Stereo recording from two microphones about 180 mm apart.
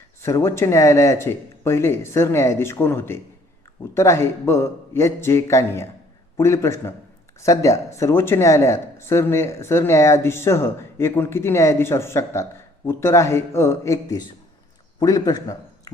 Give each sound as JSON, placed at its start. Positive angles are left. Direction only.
{"t": 0.2, "sound": "a man's voice", "side_deg": 15}